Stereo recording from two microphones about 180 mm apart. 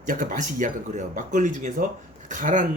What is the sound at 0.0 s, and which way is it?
Speech, 50° right (ahead or behind).